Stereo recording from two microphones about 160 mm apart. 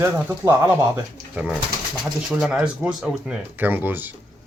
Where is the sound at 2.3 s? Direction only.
5° right (ahead or behind).